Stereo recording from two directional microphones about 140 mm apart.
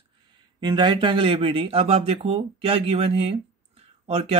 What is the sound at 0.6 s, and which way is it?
Speech, 30° right (ahead or behind).